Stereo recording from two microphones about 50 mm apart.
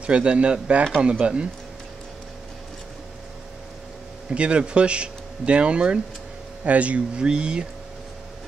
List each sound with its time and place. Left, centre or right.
0.0 s speech: right
4.3 s speech: right